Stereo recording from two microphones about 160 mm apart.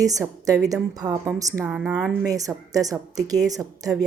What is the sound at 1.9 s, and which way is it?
Speech, 10° left (ahead or behind).